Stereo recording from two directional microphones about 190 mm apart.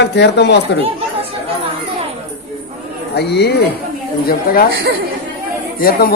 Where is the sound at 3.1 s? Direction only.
60° left (ahead or behind).